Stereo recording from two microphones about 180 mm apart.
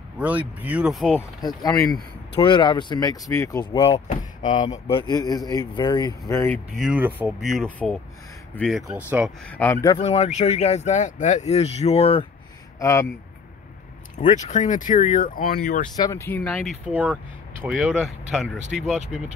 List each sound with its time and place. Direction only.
0.2 s speech: 10° right (ahead or behind)
2.3 s speech: 25° left (ahead or behind)
3.8 s speech: 35° left (ahead or behind)
4.6 s speech: 25° left (ahead or behind)
6.8 s speech: 5° right (ahead or behind)
9.5 s speech: 10° left (ahead or behind)
9.9 s speech: 35° left (ahead or behind)
12.7 s speech: 15° left (ahead or behind)
14.1 s speech: 45° left (ahead or behind)
16.0 s speech: 15° left (ahead or behind)
16.8 s speech: 5° right (ahead or behind)